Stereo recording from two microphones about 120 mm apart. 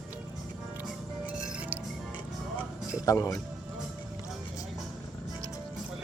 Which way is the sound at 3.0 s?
25° left (ahead or behind).